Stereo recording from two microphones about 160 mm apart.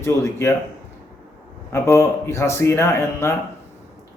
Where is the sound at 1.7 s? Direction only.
15° left (ahead or behind).